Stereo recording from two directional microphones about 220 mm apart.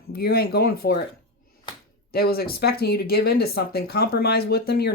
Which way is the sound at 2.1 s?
45° left (ahead or behind).